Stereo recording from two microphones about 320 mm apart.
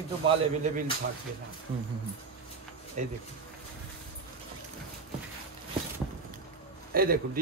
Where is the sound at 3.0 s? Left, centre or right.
Right.